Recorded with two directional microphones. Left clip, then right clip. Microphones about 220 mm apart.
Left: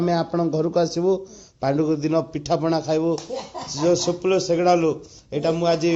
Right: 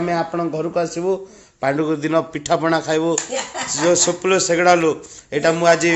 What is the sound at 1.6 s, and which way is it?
A man's voice, 15° right (ahead or behind).